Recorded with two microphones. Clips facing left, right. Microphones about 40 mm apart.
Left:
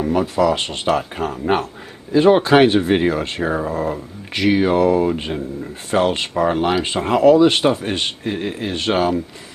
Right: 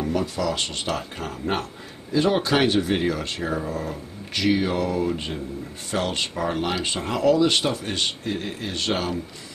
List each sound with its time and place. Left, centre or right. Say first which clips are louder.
0.0 s speech: left 8 dB; left